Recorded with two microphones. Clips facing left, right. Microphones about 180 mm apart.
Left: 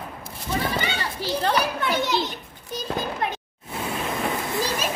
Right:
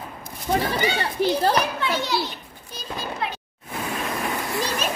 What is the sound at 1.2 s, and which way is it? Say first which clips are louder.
Speech: right 10 dB; 60° right (ahead or behind).